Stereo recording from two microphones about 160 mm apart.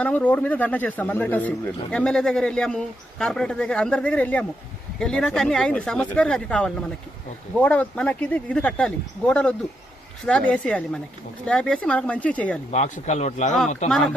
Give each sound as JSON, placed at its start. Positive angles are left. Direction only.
{"t": 0.0, "sound": "speech", "side_deg": 10}
{"t": 12.7, "sound": "speech", "side_deg": 45}